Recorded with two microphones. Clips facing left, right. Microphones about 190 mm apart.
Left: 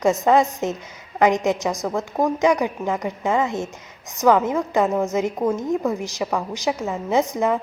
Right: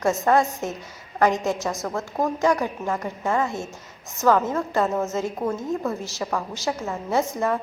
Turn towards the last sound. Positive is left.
turn(degrees=15)  # may be behind; listen again after turning